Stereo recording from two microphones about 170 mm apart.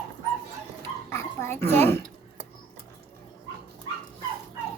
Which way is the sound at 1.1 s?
15° left (ahead or behind).